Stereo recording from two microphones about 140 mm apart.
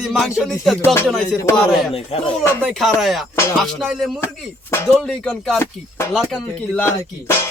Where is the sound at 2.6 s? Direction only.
Centre (ahead or behind).